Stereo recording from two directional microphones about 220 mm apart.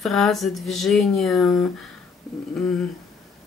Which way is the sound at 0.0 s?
Centre (ahead or behind).